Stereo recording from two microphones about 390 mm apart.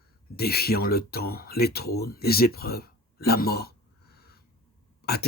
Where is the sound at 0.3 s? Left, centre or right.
Left.